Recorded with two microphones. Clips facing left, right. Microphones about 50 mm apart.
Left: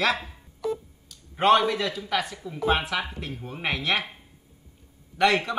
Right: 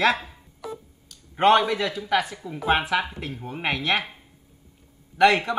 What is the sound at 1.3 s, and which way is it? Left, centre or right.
A man's voice, centre.